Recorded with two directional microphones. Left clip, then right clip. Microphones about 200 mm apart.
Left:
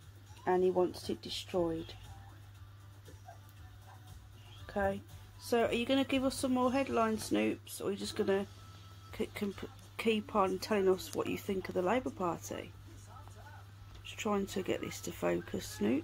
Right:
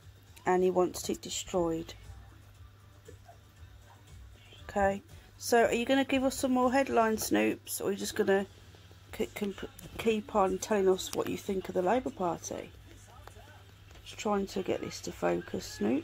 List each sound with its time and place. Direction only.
0.4 s speech: 50° right (ahead or behind)
4.6 s speech: 40° right (ahead or behind)
14.6 s speech: 20° right (ahead or behind)